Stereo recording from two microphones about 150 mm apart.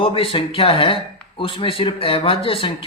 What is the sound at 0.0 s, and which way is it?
Speech, 35° left (ahead or behind).